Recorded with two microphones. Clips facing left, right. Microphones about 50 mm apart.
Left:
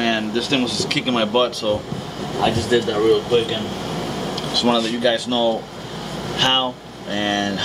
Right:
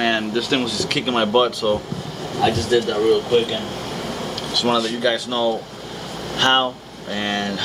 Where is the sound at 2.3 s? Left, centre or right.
Centre.